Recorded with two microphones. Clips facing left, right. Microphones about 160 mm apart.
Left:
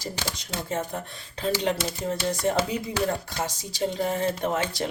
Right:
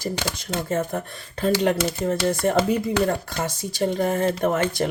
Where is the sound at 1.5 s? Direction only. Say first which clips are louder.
Right 5 dB; 60° right (ahead or behind).